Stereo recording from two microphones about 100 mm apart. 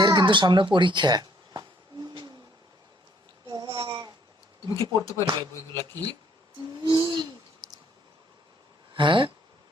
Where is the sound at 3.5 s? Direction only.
40° right (ahead or behind).